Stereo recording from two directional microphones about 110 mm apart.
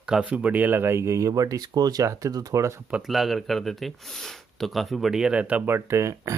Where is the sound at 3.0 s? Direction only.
Centre (ahead or behind).